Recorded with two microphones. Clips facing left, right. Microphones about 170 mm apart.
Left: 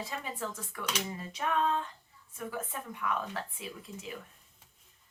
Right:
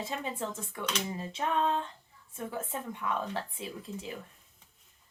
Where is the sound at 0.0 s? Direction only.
25° right (ahead or behind).